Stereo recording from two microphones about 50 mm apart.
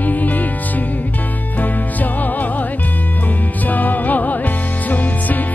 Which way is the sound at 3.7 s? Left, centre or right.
Left.